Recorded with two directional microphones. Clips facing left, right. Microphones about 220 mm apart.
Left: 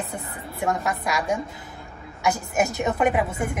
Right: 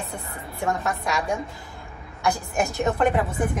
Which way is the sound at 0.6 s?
Centre (ahead or behind).